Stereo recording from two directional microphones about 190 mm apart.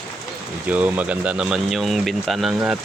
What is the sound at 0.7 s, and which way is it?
Speech, 10° right (ahead or behind).